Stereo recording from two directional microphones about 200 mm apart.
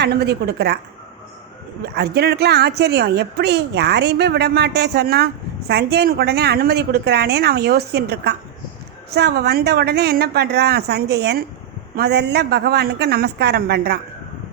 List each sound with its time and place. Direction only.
0.0 s a woman's voice: 55° right (ahead or behind)
2.0 s a woman's voice: 55° right (ahead or behind)